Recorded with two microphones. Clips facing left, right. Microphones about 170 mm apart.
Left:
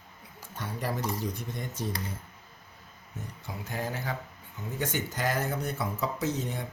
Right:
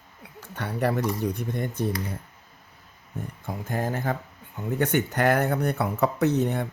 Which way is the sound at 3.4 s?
50° right (ahead or behind).